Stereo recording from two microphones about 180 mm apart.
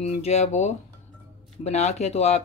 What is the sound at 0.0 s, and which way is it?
Speech, 35° left (ahead or behind).